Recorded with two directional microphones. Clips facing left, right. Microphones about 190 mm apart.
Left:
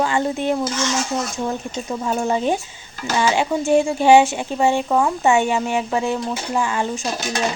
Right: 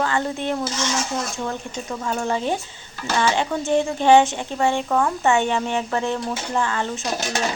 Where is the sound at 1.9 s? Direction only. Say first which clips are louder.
Left 3 dB; 20° left (ahead or behind).